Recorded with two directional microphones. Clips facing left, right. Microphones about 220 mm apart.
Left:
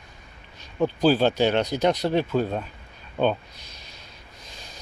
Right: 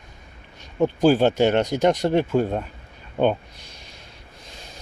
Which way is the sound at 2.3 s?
15° right (ahead or behind).